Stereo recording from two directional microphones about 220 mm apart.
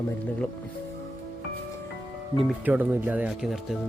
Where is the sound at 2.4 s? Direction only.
10° right (ahead or behind).